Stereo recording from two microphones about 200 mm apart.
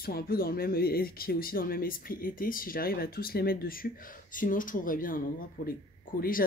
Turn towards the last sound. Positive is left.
turn(degrees=45)  # may be behind; listen again after turning